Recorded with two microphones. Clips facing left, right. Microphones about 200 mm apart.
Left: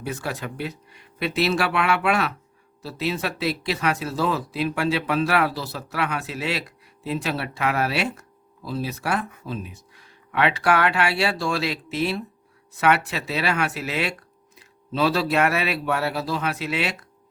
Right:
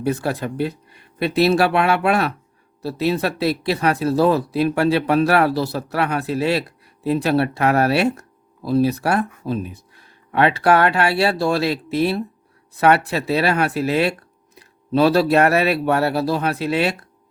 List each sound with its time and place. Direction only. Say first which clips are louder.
0.0 s speech: right 8 dB; 35° right (ahead or behind)